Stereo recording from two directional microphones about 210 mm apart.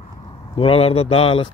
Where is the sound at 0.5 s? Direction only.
25° left (ahead or behind).